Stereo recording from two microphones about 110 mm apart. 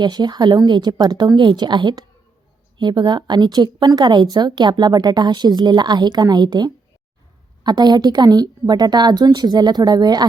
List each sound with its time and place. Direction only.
0.0 s a woman's voice: 40° right (ahead or behind)